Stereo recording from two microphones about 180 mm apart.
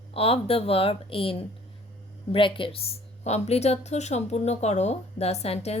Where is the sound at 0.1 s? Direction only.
30° left (ahead or behind).